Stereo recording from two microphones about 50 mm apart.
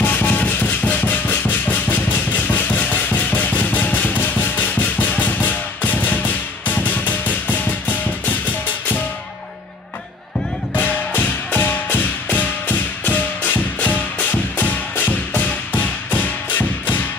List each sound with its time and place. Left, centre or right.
0.0 s music: left
10.7 s music: left